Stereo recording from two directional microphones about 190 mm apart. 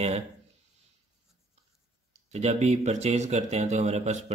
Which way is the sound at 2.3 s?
35° right (ahead or behind).